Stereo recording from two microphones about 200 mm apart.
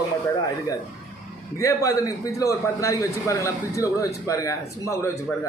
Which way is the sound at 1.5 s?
15° left (ahead or behind).